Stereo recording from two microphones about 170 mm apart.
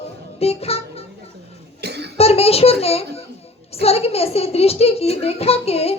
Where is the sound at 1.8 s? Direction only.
75° right (ahead or behind).